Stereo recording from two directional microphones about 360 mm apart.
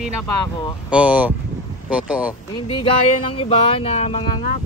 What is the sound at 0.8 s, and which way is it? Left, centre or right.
Speech, centre.